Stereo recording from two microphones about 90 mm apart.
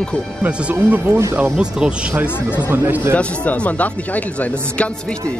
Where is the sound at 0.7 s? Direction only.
25° right (ahead or behind).